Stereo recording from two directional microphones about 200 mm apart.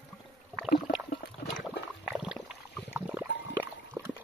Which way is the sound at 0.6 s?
Centre (ahead or behind).